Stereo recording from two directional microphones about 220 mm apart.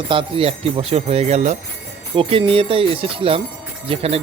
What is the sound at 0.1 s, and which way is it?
Speech, 25° right (ahead or behind).